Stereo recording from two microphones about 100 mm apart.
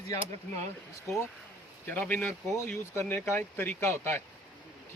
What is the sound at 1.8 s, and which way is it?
Speech, 20° left (ahead or behind).